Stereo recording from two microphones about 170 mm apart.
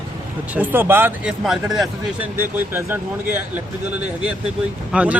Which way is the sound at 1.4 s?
Centre (ahead or behind).